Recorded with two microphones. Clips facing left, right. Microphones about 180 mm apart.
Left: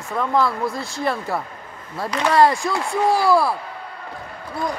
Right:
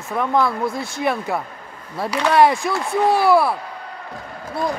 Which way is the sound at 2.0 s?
Centre (ahead or behind).